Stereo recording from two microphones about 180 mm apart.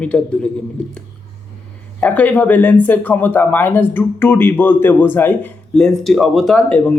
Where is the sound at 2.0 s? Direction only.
10° left (ahead or behind).